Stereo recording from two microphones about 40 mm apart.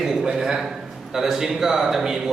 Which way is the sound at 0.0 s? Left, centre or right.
Centre.